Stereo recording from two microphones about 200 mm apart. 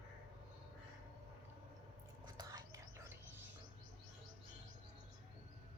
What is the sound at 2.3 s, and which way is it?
Whispering, 15° right (ahead or behind).